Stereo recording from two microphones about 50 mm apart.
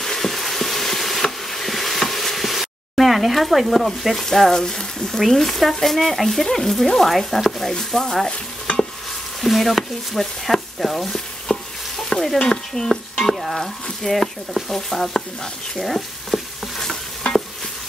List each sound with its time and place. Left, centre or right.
0.0 s frying: centre
5.2 s speech: centre
8.3 s stir: left
9.4 s speech: centre
12.0 s stir: centre
12.4 s speech: centre
15.8 s stir: centre
16.8 s stir: centre